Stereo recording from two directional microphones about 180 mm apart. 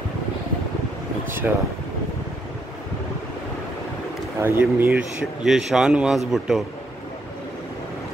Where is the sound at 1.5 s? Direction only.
5° right (ahead or behind).